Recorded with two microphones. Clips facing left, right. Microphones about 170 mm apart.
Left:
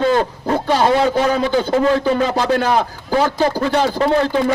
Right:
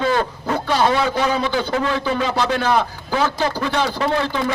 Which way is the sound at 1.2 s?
45° left (ahead or behind).